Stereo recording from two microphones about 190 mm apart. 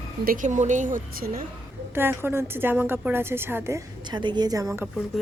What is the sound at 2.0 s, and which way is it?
A woman's voice, 10° right (ahead or behind).